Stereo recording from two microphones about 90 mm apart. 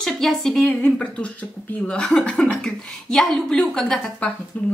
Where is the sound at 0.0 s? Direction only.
5° left (ahead or behind).